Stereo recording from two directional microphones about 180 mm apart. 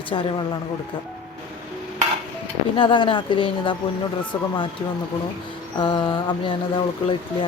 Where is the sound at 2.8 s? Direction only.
30° left (ahead or behind).